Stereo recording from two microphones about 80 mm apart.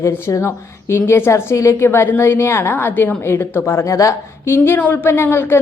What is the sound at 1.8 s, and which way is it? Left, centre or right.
A woman's voice, left.